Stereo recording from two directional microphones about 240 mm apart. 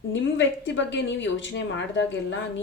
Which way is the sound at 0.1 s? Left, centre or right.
Left.